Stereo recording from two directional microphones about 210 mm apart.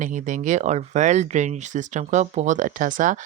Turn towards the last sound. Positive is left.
turn(degrees=-40)  # may be behind; listen again after turning